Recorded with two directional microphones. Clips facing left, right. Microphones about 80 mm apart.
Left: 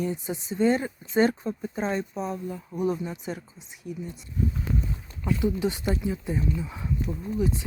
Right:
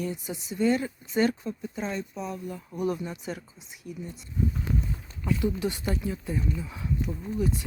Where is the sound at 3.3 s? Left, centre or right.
Centre.